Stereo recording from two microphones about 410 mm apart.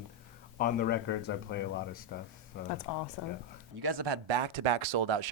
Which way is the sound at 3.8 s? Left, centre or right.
Right.